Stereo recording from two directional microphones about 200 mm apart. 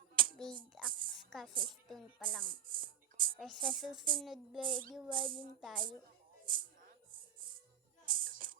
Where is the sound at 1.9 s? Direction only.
Centre (ahead or behind).